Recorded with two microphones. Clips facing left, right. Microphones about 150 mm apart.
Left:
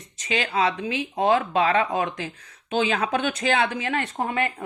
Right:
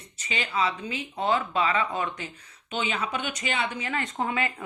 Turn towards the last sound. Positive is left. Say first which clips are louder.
# left 3 dB
turn(degrees=55)  # may be behind; listen again after turning